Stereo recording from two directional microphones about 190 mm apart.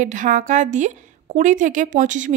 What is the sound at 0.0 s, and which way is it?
Speech, 40° right (ahead or behind).